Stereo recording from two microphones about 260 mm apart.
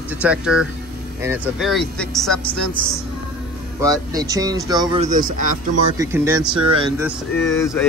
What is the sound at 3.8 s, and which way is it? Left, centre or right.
Speech, centre.